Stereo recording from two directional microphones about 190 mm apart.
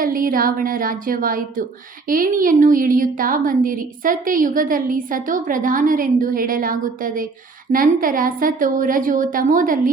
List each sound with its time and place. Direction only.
0.0 s a woman's voice: 45° right (ahead or behind)